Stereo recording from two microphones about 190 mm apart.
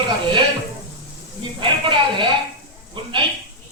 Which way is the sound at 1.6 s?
25° right (ahead or behind).